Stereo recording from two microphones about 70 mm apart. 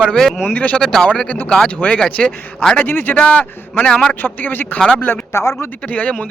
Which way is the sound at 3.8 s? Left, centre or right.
Centre.